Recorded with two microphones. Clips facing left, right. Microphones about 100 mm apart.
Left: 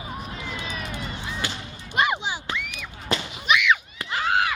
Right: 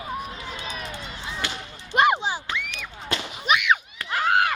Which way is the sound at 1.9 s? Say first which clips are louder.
Right 4 dB; 50° right (ahead or behind).